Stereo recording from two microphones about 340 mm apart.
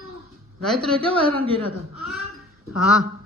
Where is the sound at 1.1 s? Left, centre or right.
Centre.